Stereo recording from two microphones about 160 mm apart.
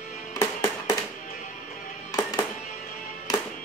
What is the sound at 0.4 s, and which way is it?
Music, 20° left (ahead or behind).